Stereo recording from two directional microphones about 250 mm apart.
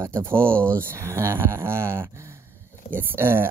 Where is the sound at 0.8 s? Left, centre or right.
Centre.